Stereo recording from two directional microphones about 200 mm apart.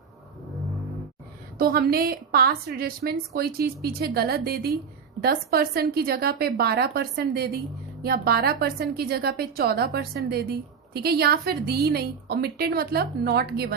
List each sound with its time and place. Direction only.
1.5 s a woman's voice: 50° right (ahead or behind)